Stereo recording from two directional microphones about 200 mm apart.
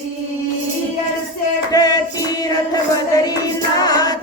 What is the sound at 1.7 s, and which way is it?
Music, 20° left (ahead or behind).